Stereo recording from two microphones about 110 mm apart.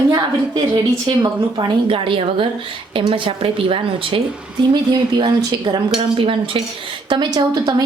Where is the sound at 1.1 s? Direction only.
55° right (ahead or behind).